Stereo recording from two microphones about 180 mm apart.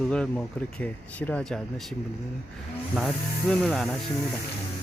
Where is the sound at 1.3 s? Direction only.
5° left (ahead or behind).